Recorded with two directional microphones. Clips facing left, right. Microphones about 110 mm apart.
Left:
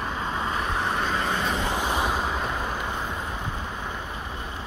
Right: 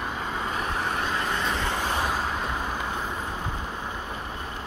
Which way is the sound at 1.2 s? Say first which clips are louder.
Left 1 dB; 20° left (ahead or behind).